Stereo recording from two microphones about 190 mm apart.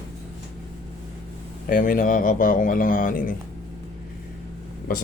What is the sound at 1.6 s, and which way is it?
Speech, 45° left (ahead or behind).